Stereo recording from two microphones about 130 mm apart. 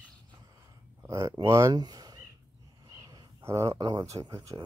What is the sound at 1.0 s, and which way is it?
Speech, 25° right (ahead or behind).